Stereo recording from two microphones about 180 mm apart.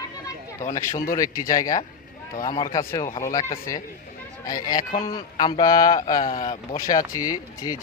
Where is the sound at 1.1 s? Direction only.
20° left (ahead or behind).